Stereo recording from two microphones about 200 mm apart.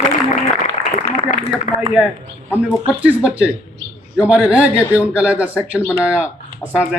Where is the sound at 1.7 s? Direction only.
40° left (ahead or behind).